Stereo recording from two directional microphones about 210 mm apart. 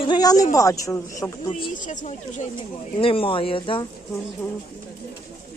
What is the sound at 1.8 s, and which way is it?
Speech, 35° left (ahead or behind).